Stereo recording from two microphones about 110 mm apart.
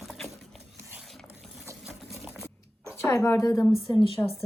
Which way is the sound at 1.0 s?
Centre (ahead or behind).